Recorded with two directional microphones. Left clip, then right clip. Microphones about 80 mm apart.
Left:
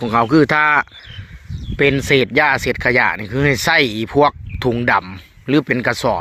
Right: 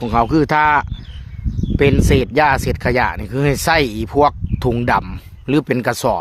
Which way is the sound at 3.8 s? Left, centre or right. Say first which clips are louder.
Left 1 dB; right.